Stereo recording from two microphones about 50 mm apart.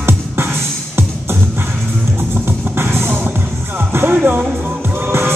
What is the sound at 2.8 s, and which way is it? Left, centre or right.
Music, right.